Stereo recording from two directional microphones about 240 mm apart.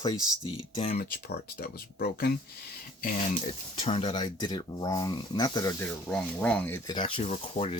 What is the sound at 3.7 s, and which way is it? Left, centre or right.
Speech, left.